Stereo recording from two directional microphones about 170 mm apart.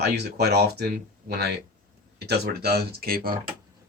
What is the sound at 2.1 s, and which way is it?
Speech, 70° right (ahead or behind).